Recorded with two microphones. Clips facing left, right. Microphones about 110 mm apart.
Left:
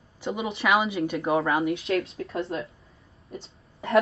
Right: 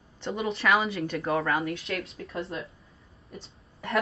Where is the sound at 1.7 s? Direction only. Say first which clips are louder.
Left 7 dB; 30° left (ahead or behind).